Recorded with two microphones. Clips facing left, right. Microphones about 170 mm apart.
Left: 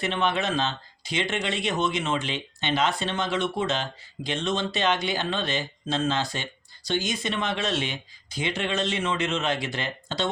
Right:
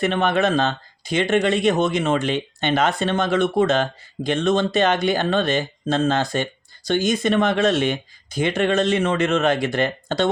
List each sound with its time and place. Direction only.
0.0 s speech: 50° right (ahead or behind)